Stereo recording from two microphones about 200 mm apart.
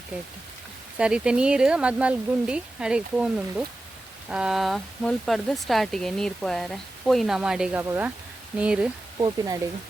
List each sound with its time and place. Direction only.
0.9 s speech: 5° right (ahead or behind)
9.1 s speech: 15° right (ahead or behind)